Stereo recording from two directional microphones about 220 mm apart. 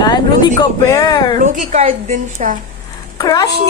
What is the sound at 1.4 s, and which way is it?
A woman's voice, 35° right (ahead or behind).